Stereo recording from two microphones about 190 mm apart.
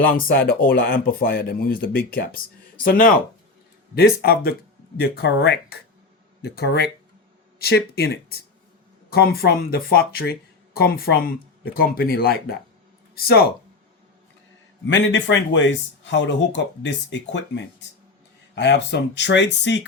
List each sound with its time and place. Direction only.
0.3 s speech: 50° left (ahead or behind)
14.8 s speech: 75° left (ahead or behind)